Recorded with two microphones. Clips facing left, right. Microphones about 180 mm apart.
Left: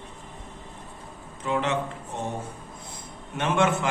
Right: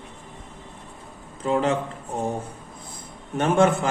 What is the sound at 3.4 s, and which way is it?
Mantra, 40° right (ahead or behind).